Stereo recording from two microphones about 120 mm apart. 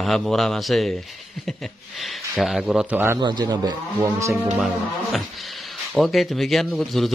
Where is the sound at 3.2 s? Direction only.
40° right (ahead or behind).